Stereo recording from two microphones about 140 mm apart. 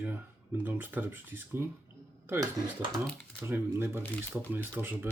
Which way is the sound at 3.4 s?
15° right (ahead or behind).